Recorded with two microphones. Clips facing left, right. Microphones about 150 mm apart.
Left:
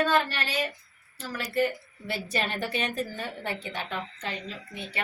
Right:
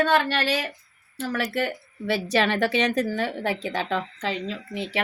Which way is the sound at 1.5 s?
80° right.